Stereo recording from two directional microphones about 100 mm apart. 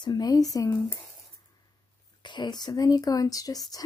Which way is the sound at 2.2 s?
50° left (ahead or behind).